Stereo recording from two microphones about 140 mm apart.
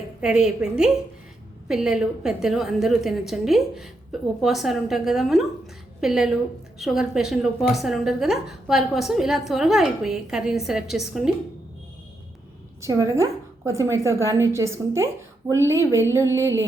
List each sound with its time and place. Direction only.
0.2 s a woman's voice: 5° right (ahead or behind)
12.8 s a woman's voice: 20° right (ahead or behind)